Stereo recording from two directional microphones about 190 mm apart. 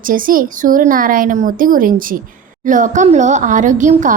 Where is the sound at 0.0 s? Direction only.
45° right (ahead or behind).